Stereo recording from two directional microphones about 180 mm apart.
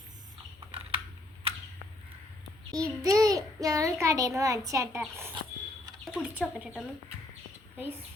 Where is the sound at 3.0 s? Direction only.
20° right (ahead or behind).